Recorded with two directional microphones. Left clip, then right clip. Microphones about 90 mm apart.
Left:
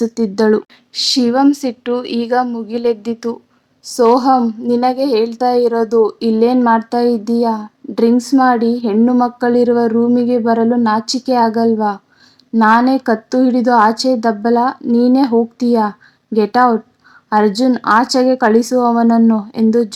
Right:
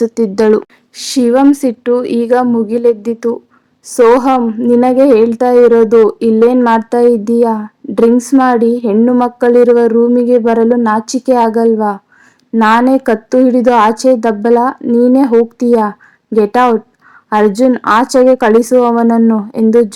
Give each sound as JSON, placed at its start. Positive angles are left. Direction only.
{"t": 0.1, "sound": "a woman's voice", "side_deg": 0}
{"t": 0.9, "sound": "speech", "side_deg": -20}
{"t": 12.5, "sound": "a woman's voice", "side_deg": -5}
{"t": 12.9, "sound": "a woman's voice", "side_deg": -20}